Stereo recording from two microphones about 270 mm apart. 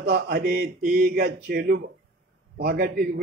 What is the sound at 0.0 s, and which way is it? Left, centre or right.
A man's voice, right.